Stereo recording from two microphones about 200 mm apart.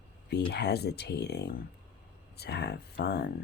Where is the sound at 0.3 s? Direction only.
55° left (ahead or behind).